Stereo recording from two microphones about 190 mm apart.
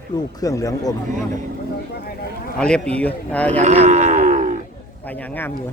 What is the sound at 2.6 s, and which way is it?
A man's voice, 5° left (ahead or behind).